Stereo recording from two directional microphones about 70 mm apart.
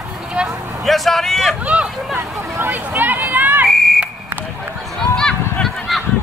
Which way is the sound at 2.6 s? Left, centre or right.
Right.